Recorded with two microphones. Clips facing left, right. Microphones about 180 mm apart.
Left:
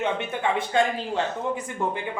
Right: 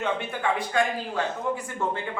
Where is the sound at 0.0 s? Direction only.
20° left (ahead or behind).